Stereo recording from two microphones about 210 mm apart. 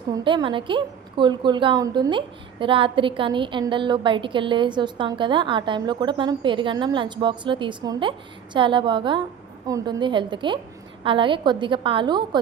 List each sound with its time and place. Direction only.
0.1 s a woman's voice: 20° right (ahead or behind)